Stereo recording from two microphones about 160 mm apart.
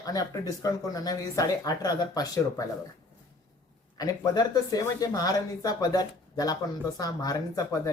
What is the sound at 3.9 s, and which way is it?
Speech, 25° left (ahead or behind).